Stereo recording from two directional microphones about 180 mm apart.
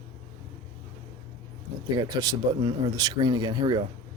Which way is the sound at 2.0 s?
20° right (ahead or behind).